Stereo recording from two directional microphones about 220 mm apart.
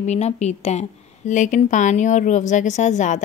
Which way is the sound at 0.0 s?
30° left (ahead or behind).